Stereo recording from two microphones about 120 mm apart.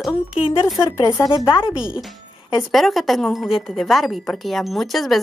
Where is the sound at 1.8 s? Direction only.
5° right (ahead or behind).